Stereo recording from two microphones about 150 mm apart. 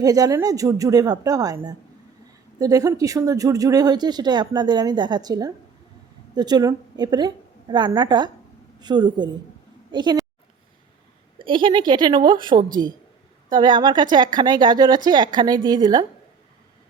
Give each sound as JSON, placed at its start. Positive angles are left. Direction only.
{"t": 0.0, "sound": "a woman's voice", "side_deg": -25}
{"t": 11.4, "sound": "a woman's voice", "side_deg": -35}